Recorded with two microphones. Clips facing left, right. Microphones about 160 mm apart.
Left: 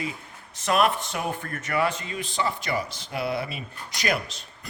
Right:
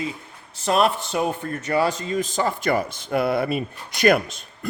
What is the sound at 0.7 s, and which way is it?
Speech, 30° right (ahead or behind).